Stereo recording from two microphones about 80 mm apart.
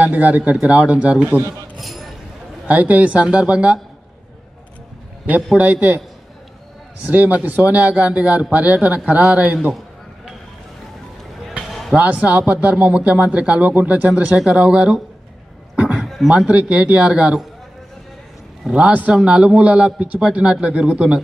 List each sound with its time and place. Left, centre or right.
0.0 s a man's voice: right
1.8 s a sound: centre
2.7 s a man's voice: centre
5.6 s speech: right
7.1 s a man's voice: centre
11.9 s a man's voice: centre
15.7 s a sound: centre
16.0 s beatboxing: centre
16.3 s a man's voice: centre
18.6 s a man's voice: centre